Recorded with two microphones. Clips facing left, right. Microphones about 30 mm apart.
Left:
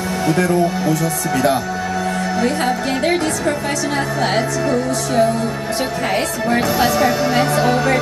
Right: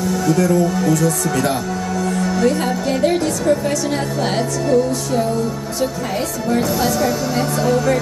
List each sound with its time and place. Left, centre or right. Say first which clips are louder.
0.1 s music: even; left
0.7 s music: right 2 dB; centre
6.5 s speech: left 2 dB; left